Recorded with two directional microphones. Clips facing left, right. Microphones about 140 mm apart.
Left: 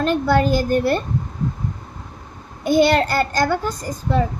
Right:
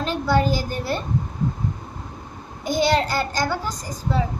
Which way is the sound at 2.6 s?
55° left (ahead or behind).